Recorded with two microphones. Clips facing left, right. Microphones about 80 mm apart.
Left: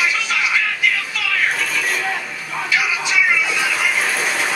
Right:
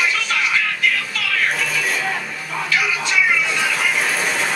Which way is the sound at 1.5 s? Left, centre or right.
Centre.